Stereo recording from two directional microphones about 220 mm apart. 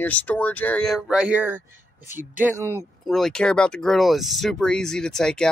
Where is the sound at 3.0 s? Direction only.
Centre (ahead or behind).